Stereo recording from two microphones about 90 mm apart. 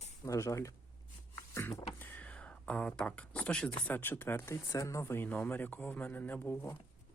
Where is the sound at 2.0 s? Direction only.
20° left (ahead or behind).